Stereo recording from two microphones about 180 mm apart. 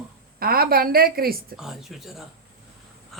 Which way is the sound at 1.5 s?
Centre (ahead or behind).